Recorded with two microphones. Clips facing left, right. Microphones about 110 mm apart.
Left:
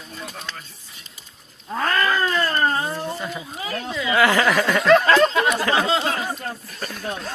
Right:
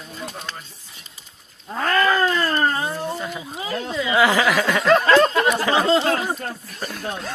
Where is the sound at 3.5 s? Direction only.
25° right (ahead or behind).